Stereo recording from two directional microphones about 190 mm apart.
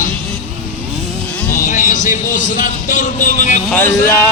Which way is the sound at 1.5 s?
45° left (ahead or behind).